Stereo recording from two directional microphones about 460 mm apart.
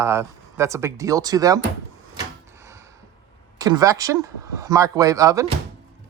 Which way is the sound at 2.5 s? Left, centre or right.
Centre.